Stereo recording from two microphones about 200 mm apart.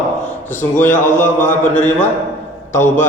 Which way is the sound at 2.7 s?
35° left (ahead or behind).